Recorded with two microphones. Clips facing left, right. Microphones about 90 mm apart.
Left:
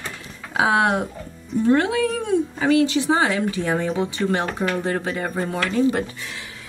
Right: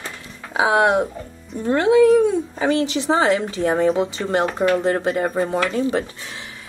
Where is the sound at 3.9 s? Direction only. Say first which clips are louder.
Right 2 dB; 5° right (ahead or behind).